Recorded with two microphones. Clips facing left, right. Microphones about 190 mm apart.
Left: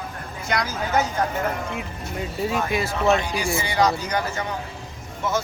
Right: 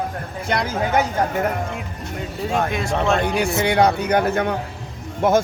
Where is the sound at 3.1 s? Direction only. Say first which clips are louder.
Right 3 dB; 60° right (ahead or behind).